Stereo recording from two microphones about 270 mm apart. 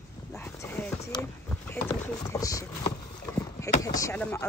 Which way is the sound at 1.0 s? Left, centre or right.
Centre.